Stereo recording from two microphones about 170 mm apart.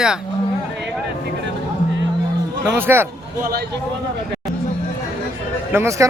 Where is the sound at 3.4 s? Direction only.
65° right (ahead or behind).